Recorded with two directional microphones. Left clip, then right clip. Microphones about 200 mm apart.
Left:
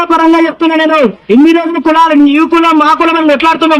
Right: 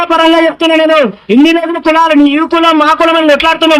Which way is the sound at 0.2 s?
20° right (ahead or behind).